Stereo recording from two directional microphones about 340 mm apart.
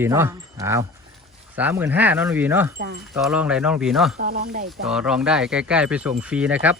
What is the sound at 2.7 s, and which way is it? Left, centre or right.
Speech, right.